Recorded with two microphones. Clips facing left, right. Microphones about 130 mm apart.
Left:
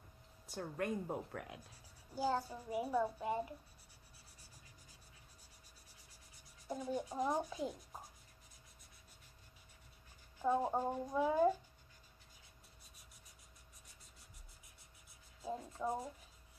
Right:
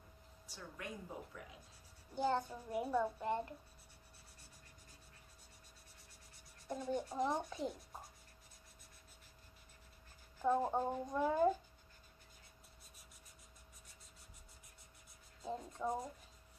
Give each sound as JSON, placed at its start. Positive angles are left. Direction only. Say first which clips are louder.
{"t": 0.5, "sound": "a woman's voice", "louder": "left 9 dB", "side_deg": 50}
{"t": 2.1, "sound": "a child's voice", "louder": "right 1 dB", "side_deg": 5}
{"t": 6.3, "sound": "speech", "louder": "even", "side_deg": 0}
{"t": 10.4, "sound": "a child's voice", "louder": "even", "side_deg": 5}
{"t": 15.4, "sound": "a child's voice", "louder": "even", "side_deg": 5}